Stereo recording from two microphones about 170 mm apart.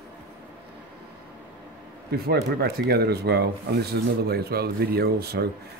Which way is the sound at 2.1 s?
65° right (ahead or behind).